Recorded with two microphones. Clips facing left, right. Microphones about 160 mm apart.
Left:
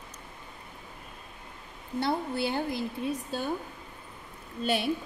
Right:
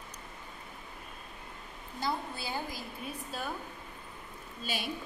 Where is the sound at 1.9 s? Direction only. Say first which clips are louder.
Left 7 dB; 65° left (ahead or behind).